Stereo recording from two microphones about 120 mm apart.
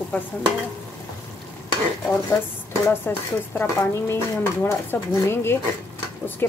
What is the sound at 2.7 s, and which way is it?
Speech, 20° left (ahead or behind).